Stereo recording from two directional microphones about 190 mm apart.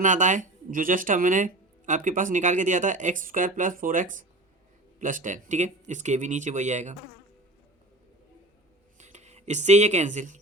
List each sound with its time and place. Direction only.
0.0 s speech: 40° right (ahead or behind)
9.0 s speech: 40° right (ahead or behind)